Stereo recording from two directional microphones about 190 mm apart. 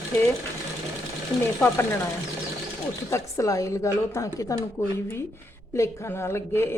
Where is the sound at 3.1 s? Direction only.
15° left (ahead or behind).